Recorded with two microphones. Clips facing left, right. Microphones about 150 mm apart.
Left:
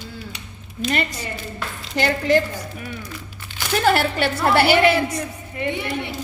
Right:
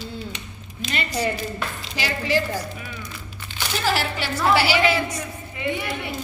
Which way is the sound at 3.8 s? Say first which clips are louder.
Left 6 dB; 60° left (ahead or behind).